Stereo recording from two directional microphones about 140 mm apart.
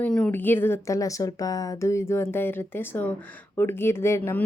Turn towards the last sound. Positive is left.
turn(degrees=15)  # may be behind; listen again after turning